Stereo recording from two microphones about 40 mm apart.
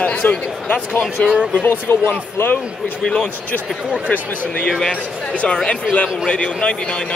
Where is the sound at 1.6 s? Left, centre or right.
Left.